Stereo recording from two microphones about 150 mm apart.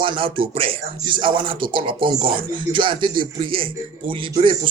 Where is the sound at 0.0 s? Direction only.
35° right (ahead or behind).